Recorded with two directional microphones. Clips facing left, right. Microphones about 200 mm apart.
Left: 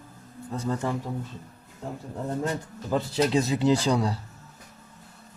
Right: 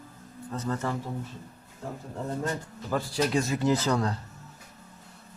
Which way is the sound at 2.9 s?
20° left (ahead or behind).